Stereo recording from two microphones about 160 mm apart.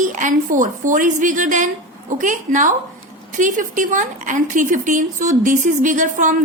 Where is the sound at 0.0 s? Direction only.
55° right (ahead or behind).